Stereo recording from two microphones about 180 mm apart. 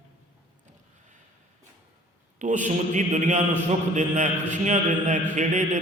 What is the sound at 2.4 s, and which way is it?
A man's voice, 40° right (ahead or behind).